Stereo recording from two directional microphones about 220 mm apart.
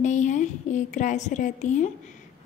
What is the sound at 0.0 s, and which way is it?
A woman's voice, 35° left (ahead or behind).